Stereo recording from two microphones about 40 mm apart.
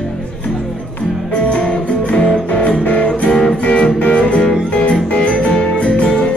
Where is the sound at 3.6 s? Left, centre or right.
Left.